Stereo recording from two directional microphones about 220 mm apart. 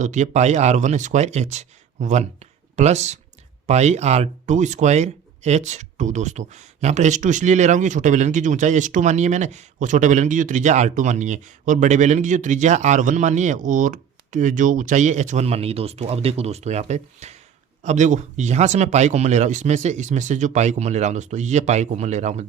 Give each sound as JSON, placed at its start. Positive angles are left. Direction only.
{"t": 0.0, "sound": "speech", "side_deg": -30}